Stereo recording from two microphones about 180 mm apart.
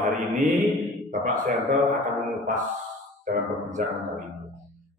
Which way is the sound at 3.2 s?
45° right (ahead or behind).